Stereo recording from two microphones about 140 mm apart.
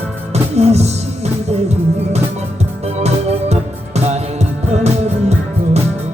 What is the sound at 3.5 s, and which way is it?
Music, 50° right (ahead or behind).